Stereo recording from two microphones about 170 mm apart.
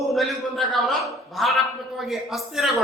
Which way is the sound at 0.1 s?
Centre (ahead or behind).